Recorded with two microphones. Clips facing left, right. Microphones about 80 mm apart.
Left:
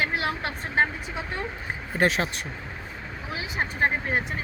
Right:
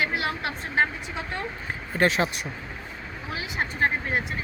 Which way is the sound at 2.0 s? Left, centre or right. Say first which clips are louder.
Right 1 dB; centre.